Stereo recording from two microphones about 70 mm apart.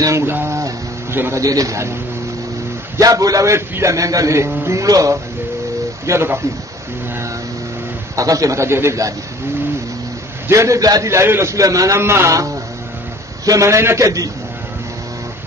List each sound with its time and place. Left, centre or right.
0.2 s a man's voice: right
1.3 s a man's voice: right
3.0 s a man's voice: right
3.5 s a man's voice: right
4.8 s a man's voice: right
6.0 s a man's voice: right
8.2 s a man's voice: right
10.5 s a man's voice: right
11.5 s a man's voice: right
12.0 s a man's voice: right